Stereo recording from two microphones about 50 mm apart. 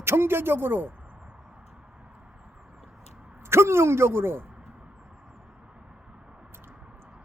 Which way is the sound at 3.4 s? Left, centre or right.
Right.